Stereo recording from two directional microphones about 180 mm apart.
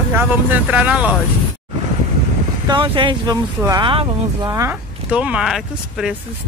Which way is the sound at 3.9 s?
30° right (ahead or behind).